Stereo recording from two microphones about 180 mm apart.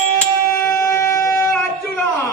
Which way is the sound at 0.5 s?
15° left (ahead or behind).